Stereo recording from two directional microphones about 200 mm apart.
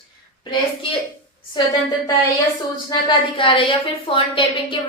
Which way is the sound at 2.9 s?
25° left (ahead or behind).